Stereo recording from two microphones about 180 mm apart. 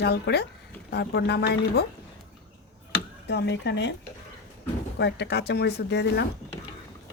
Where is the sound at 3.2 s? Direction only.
75° left (ahead or behind).